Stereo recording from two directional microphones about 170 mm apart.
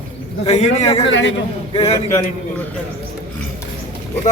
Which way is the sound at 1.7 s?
35° left (ahead or behind).